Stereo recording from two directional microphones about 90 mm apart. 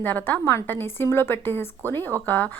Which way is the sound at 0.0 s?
20° left (ahead or behind).